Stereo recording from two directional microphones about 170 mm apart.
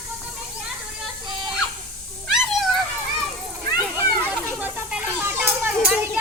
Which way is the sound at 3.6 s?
25° left (ahead or behind).